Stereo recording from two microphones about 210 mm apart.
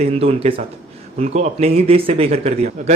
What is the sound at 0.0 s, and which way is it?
A man's voice, 30° right (ahead or behind).